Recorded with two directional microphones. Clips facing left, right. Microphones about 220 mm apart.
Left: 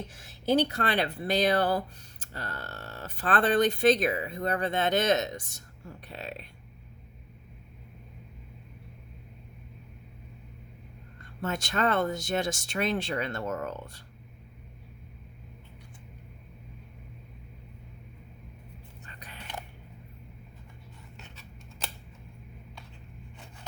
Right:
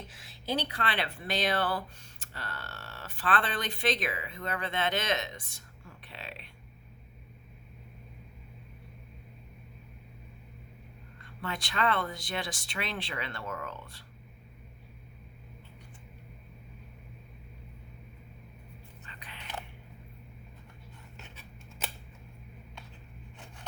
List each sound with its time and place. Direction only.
0.1 s speech: 45° left (ahead or behind)
11.3 s speech: 45° left (ahead or behind)
19.0 s whispering: 45° left (ahead or behind)